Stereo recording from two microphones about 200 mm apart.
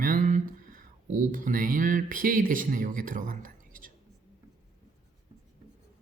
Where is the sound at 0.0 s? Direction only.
40° right (ahead or behind).